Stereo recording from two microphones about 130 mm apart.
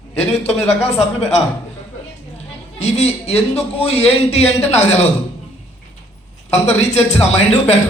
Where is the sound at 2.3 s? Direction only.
55° left (ahead or behind).